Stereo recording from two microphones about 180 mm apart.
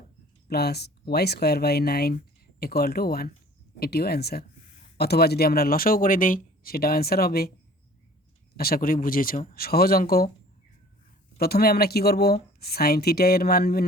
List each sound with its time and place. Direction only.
0.4 s speech: 60° left (ahead or behind)
8.5 s speech: 55° left (ahead or behind)
11.3 s speech: 60° left (ahead or behind)